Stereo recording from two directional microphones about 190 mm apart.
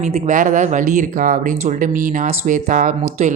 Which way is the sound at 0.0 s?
40° right (ahead or behind).